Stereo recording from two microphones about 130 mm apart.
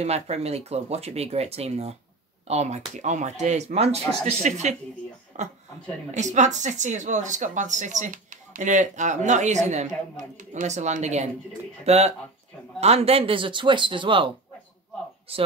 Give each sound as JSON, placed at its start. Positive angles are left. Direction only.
{"t": 0.0, "sound": "speech", "side_deg": -55}